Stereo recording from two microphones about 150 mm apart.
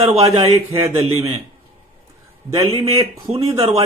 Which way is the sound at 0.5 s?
20° right (ahead or behind).